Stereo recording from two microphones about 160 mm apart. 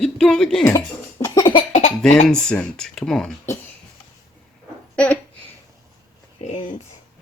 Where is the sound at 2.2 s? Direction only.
5° left (ahead or behind).